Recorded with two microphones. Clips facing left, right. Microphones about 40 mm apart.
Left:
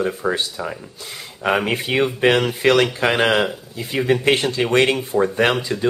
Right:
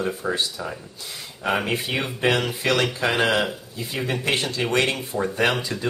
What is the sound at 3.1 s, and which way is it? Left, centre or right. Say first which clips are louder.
Speech: left 3 dB; left.